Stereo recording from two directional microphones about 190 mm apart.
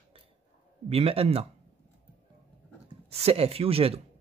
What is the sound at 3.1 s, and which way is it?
Speech, 30° right (ahead or behind).